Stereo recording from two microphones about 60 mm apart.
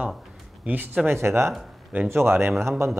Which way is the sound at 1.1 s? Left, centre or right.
Right.